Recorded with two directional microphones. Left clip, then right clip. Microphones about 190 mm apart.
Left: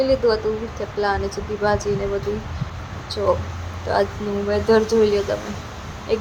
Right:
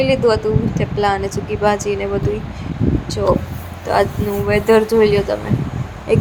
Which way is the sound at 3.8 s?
20° right (ahead or behind).